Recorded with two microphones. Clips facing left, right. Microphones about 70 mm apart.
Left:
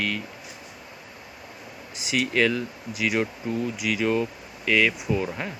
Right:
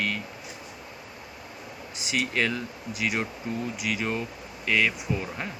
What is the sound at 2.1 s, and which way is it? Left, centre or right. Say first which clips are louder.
Speech: left 4 dB; right.